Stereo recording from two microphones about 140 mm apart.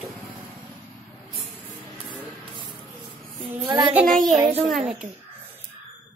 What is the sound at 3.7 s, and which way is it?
Speech, 35° right (ahead or behind).